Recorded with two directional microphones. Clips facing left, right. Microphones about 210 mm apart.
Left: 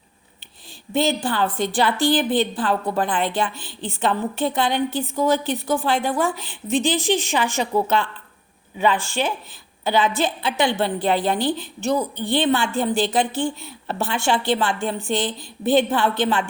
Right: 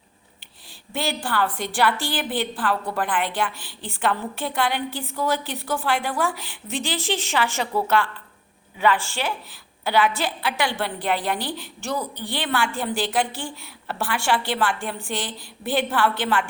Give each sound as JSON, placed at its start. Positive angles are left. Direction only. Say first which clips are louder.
{"t": 0.9, "sound": "a woman's voice", "louder": "left 5 dB", "side_deg": 20}